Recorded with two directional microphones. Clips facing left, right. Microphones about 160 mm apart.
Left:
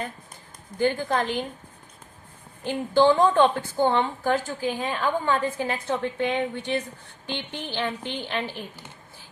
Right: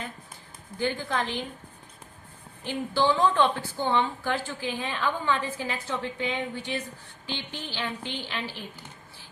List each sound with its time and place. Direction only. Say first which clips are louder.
0.8 s a woman's voice: left 5 dB; 50° left (ahead or behind)
2.6 s a woman's voice: left 6 dB; 50° left (ahead or behind)